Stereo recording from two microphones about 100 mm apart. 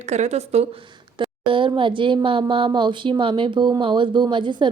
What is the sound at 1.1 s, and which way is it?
A woman's voice, 55° right (ahead or behind).